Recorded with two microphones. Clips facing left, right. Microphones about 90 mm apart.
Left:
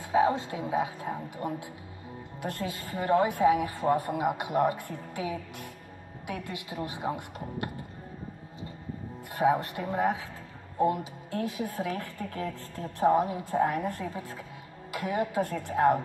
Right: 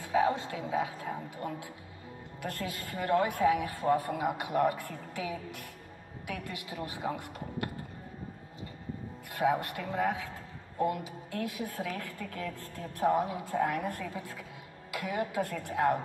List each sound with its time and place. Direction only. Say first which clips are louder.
0.0 s a woman's voice: left 3 dB; 30° left (ahead or behind)
9.3 s a woman's voice: left 4 dB; 30° left (ahead or behind)